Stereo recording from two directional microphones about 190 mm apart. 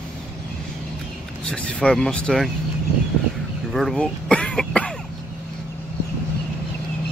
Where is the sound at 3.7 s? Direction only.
Centre (ahead or behind).